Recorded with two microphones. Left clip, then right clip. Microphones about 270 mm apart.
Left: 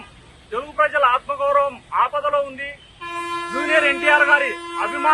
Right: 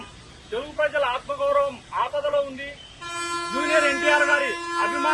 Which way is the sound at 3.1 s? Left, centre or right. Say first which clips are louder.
Left 2 dB; left.